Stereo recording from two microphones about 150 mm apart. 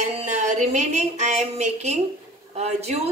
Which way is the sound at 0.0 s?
55° right (ahead or behind).